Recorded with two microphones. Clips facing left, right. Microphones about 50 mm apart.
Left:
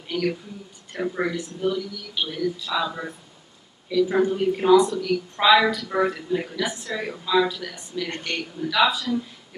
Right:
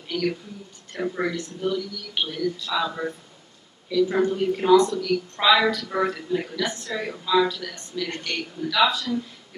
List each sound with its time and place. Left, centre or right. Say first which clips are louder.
0.1 s speech: left 1 dB; centre